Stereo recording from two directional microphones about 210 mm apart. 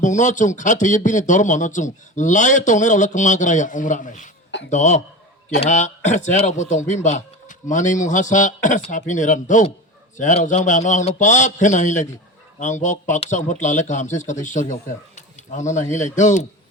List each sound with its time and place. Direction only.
0.0 s speech: 35° left (ahead or behind)